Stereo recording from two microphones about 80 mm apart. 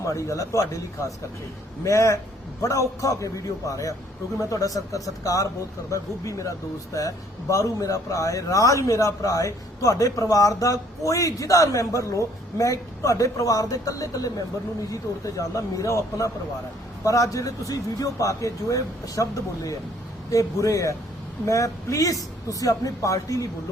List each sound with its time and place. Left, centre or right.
0.0 s a man's voice: left
1.8 s a man's voice: left
7.5 s a man's voice: left